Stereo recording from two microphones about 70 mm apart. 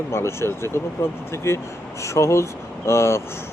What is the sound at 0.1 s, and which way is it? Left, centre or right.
Speech, left.